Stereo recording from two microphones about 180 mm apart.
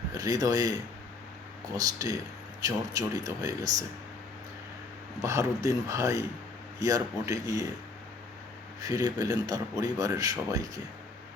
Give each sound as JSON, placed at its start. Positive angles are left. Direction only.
{"t": 0.1, "sound": "speech", "side_deg": -20}
{"t": 1.7, "sound": "a man's voice", "side_deg": -20}
{"t": 5.2, "sound": "speech", "side_deg": -15}
{"t": 8.8, "sound": "a man's voice", "side_deg": -20}